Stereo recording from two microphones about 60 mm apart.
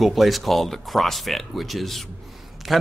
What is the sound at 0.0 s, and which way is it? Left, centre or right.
Speech, centre.